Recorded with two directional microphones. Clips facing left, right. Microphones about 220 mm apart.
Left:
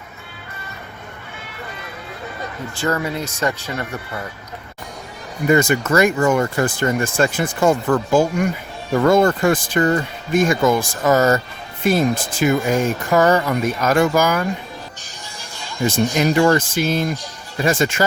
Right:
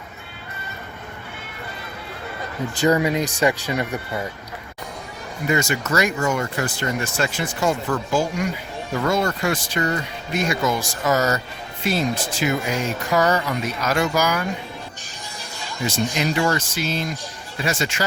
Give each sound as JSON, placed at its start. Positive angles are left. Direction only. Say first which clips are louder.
{"t": 2.8, "sound": "speech", "louder": "right 3 dB", "side_deg": -15}
{"t": 5.5, "sound": "speech", "louder": "left 6 dB", "side_deg": 50}
{"t": 15.9, "sound": "speech", "louder": "left 5 dB", "side_deg": 50}